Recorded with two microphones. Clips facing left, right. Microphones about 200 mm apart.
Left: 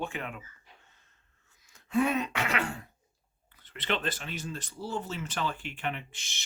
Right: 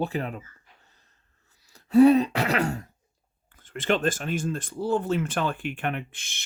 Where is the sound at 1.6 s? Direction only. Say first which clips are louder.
Right 12 dB; 40° right (ahead or behind).